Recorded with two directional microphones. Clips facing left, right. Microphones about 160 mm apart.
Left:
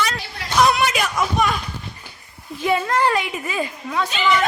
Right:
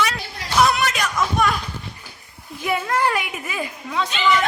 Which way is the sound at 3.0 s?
5° right (ahead or behind).